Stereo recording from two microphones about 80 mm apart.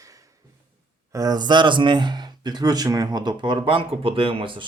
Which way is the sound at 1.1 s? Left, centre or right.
Right.